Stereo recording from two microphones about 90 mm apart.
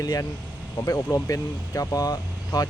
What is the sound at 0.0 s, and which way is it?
Speech, 45° left (ahead or behind).